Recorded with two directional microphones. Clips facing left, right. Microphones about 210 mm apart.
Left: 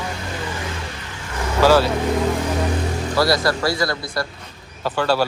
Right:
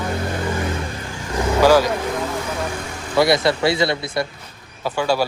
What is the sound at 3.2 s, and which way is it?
Speech, 20° right (ahead or behind).